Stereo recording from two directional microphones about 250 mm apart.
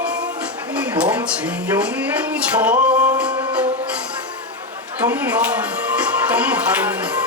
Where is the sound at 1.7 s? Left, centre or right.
Centre.